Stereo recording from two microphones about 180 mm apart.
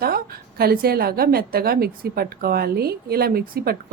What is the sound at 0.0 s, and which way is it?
A woman's voice, 55° right (ahead or behind).